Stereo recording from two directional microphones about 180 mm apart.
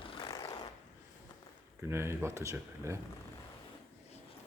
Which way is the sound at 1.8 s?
15° right (ahead or behind).